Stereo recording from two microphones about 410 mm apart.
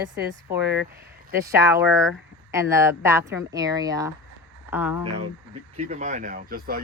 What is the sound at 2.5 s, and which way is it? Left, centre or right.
Speech, centre.